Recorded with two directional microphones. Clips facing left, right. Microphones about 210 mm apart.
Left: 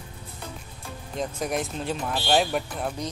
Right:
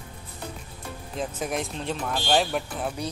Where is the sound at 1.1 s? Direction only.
Centre (ahead or behind).